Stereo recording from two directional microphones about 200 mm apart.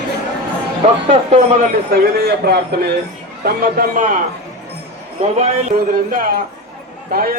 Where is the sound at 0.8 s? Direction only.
35° right (ahead or behind).